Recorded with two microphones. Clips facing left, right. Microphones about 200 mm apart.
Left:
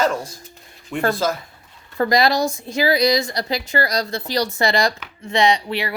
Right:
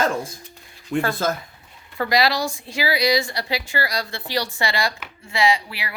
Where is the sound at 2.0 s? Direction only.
45° left (ahead or behind).